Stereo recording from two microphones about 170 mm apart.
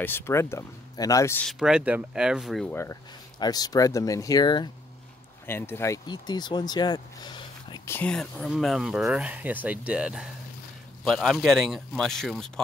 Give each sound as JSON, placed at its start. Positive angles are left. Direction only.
{"t": 0.0, "sound": "speech", "side_deg": 15}
{"t": 1.5, "sound": "speech", "side_deg": -5}
{"t": 2.7, "sound": "speech", "side_deg": 15}
{"t": 5.5, "sound": "speech", "side_deg": 15}